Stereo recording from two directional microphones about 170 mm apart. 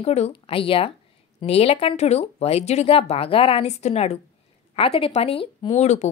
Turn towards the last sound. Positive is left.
turn(degrees=40)  # may be behind; listen again after turning